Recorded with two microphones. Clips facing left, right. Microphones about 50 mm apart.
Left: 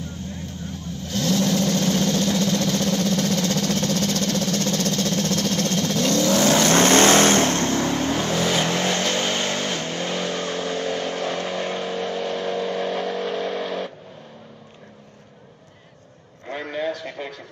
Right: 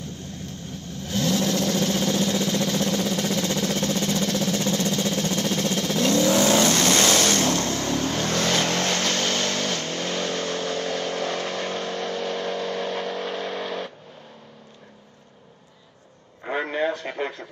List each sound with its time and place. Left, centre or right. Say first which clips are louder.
1.0 s vehicle: left 1 dB; centre
6.7 s vehicle: left 5 dB; left
7.8 s vehicle: left 2 dB; centre
16.4 s a sound: right 2 dB; centre